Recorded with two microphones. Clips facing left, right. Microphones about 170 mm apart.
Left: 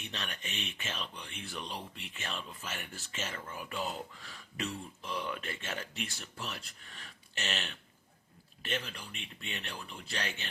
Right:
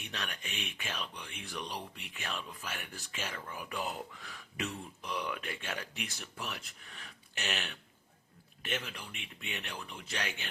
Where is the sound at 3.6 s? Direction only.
15° right (ahead or behind).